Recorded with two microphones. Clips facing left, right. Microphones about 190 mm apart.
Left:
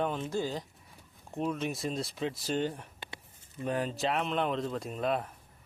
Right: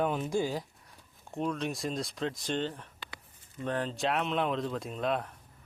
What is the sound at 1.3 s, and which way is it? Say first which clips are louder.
Speech: even; centre (ahead or behind).